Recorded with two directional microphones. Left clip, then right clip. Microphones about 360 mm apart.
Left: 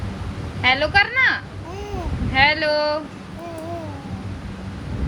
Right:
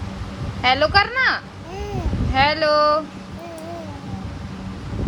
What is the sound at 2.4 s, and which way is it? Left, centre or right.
Speech, centre.